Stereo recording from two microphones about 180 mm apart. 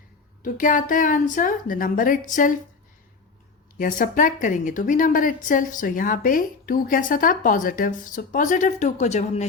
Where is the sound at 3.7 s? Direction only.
50° left (ahead or behind).